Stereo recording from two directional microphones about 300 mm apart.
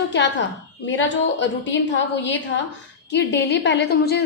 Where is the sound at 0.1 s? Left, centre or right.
Left.